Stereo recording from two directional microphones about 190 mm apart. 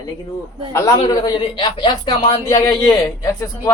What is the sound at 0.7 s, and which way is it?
Speech, 15° left (ahead or behind).